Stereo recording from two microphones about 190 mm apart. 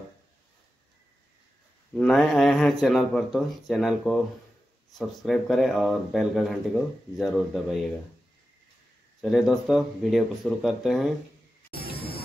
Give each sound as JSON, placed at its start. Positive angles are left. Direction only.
{"t": 2.0, "sound": "speech", "side_deg": 0}
{"t": 9.2, "sound": "speech", "side_deg": 0}
{"t": 11.8, "sound": "music", "side_deg": 55}